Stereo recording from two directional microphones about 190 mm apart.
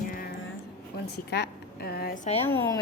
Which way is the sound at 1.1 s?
60° left (ahead or behind).